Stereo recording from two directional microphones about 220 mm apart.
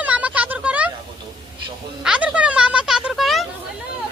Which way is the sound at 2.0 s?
5° right (ahead or behind).